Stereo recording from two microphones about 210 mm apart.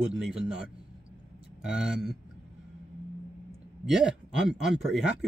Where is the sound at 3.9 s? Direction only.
5° right (ahead or behind).